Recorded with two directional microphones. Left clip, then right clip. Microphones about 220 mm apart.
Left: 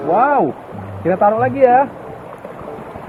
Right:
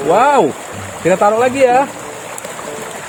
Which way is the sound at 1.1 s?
70° right (ahead or behind).